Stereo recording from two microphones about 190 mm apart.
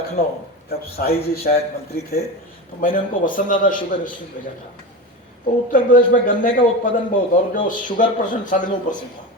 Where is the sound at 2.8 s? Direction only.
45° left (ahead or behind).